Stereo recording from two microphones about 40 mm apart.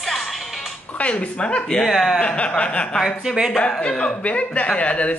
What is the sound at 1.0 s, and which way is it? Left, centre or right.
Speech, left.